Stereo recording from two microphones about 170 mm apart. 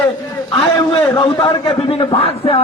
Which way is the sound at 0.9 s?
30° left (ahead or behind).